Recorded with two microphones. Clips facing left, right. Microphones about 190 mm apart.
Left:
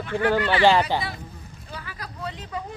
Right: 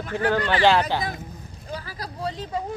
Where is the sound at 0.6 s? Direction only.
15° left (ahead or behind).